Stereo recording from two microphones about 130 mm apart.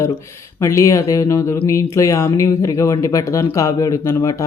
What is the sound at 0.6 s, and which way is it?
Speech, 25° left (ahead or behind).